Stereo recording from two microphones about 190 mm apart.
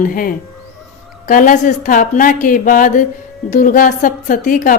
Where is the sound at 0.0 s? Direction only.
50° left (ahead or behind).